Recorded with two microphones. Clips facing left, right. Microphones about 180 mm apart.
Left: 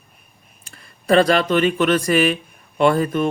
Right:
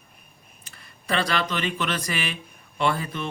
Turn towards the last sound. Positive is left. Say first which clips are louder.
# left 9 dB
turn(degrees=50)  # may be behind; listen again after turning